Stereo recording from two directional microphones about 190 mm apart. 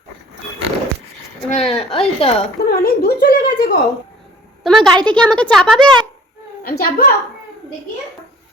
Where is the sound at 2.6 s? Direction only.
55° left (ahead or behind).